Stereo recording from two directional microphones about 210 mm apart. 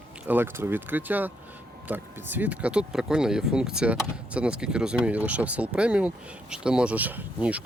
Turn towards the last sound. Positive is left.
turn(degrees=-5)  # may be behind; listen again after turning